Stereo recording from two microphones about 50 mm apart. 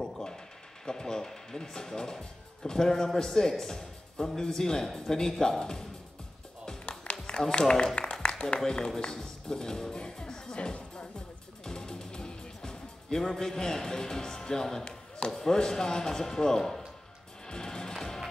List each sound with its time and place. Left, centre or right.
0.0 s a sound: centre
0.8 s speech: centre
6.6 s music: centre
7.5 s speech: centre
11.6 s music: centre
14.9 s chop: left
15.3 s speech: centre
17.5 s music: centre